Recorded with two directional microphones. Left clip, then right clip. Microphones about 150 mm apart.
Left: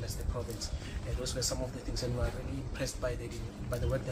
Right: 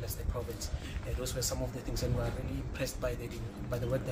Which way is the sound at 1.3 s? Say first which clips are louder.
Left 2 dB; 20° right (ahead or behind).